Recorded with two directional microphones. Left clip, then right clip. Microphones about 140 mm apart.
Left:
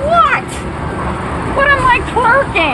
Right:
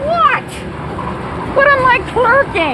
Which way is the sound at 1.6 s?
50° right (ahead or behind).